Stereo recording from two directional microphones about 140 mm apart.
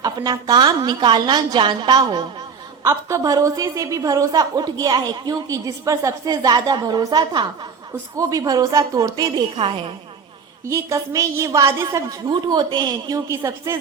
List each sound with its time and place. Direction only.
0.0 s a woman's voice: 30° right (ahead or behind)
9.6 s a woman's voice: 40° right (ahead or behind)
10.7 s a woman's voice: 20° right (ahead or behind)
13.1 s a woman's voice: 20° right (ahead or behind)